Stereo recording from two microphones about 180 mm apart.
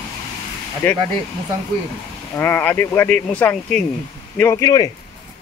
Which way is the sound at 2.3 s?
10° left (ahead or behind).